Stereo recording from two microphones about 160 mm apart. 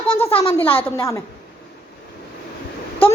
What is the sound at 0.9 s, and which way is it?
Speech, 20° left (ahead or behind).